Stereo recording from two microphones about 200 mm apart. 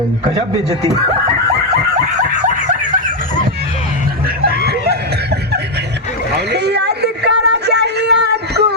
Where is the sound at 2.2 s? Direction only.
40° right (ahead or behind).